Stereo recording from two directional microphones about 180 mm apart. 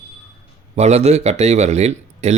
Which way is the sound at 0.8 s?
35° right (ahead or behind).